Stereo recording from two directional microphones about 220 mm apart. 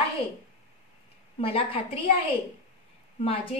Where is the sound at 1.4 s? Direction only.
25° left (ahead or behind).